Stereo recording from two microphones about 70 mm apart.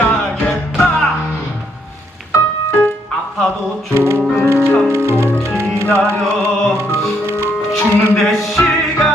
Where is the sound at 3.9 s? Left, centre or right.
Right.